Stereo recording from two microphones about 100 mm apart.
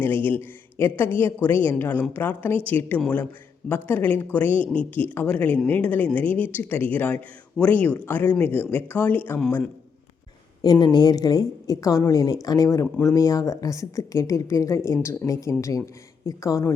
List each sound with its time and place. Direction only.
0.0 s speech: 20° left (ahead or behind)
10.6 s a woman's voice: 45° left (ahead or behind)